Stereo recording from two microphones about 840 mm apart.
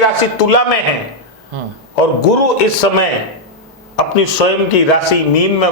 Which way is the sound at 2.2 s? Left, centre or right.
Left.